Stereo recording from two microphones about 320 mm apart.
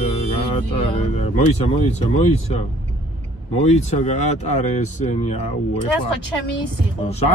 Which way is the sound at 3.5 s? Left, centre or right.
Left.